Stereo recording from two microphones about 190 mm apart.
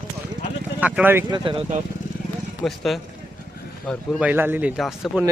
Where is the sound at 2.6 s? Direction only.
Centre (ahead or behind).